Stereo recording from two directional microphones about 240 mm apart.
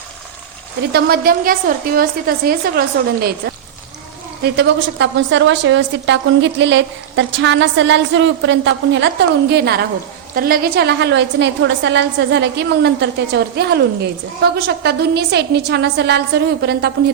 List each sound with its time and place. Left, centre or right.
0.9 s a woman's voice: right
4.4 s a woman's voice: right